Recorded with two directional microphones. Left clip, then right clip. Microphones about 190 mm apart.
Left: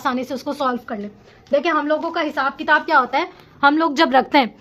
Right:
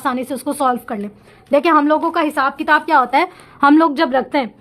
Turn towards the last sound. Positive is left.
turn(degrees=0)  # may be behind; listen again after turning